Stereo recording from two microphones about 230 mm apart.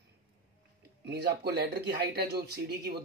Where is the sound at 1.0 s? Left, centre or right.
Right.